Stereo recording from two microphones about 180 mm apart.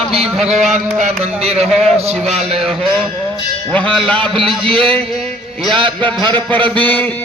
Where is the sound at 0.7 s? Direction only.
40° right (ahead or behind).